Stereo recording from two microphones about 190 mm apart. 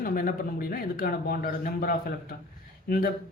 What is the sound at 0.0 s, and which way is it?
Speech, 50° left (ahead or behind).